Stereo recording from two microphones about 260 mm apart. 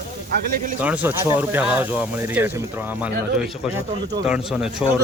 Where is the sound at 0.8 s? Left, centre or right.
Centre.